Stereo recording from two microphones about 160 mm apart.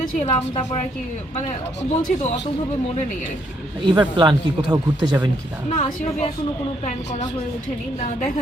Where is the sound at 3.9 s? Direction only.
30° right (ahead or behind).